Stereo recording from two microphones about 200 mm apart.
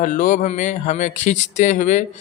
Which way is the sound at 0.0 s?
40° left (ahead or behind).